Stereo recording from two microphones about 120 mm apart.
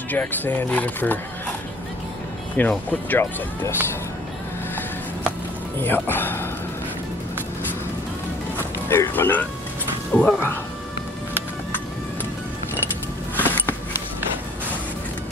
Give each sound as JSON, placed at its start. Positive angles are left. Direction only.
{"t": 0.1, "sound": "speech", "side_deg": 15}
{"t": 2.5, "sound": "speech", "side_deg": 10}
{"t": 5.8, "sound": "speech", "side_deg": 15}
{"t": 8.5, "sound": "speech", "side_deg": 20}
{"t": 13.4, "sound": "a sound", "side_deg": 15}